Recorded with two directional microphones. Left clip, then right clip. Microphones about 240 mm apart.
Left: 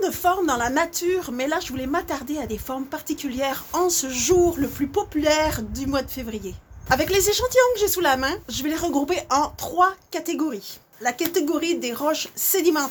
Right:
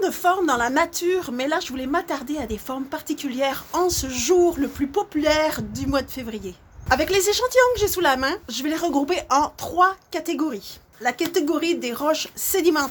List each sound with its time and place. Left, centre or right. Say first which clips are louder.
0.0 s speech: right 1 dB; centre